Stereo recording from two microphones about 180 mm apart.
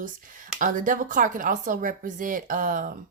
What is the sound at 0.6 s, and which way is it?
Speech, 45° right (ahead or behind).